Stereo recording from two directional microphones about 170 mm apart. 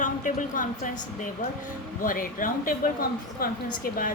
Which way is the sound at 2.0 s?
55° left (ahead or behind).